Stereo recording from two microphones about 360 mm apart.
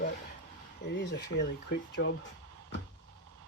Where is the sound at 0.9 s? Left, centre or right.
Left.